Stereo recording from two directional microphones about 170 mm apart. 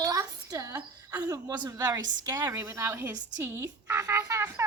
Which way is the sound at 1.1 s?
10° right (ahead or behind).